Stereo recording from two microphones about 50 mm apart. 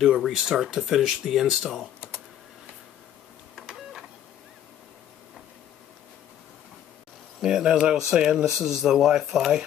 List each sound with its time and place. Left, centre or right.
0.0 s speech: centre
2.0 s typing: left
3.5 s printer: centre
7.4 s speech: centre